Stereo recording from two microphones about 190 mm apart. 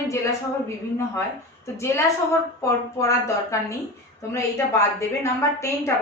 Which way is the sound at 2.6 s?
15° left (ahead or behind).